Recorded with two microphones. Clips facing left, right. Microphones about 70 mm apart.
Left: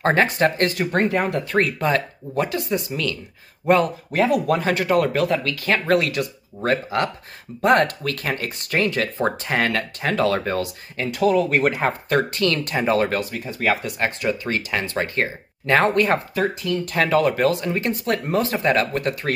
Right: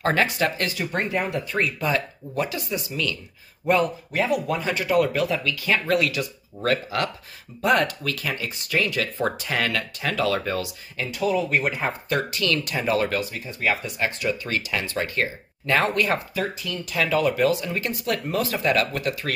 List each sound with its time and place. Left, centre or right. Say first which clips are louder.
0.0 s speech: left 4 dB; left
4.2 s speech: left 5 dB; left
6.6 s speech: left 2 dB; left
7.6 s speech: left 4 dB; left
13.6 s speech: left 3 dB; left